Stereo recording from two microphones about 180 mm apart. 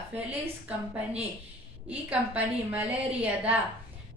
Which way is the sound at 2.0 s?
10° right (ahead or behind).